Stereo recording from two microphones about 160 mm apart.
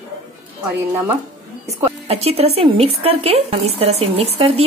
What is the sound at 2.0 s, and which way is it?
A woman's voice, 40° right (ahead or behind).